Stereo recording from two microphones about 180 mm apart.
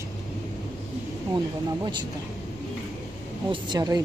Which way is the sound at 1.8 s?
25° right (ahead or behind).